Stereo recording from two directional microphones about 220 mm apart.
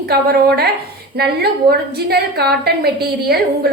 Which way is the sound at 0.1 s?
45° right (ahead or behind).